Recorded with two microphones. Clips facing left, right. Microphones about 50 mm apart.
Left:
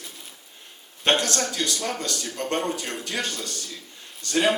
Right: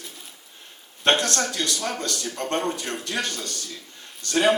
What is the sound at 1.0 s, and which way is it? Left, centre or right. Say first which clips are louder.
A man's voice: right 1 dB; right.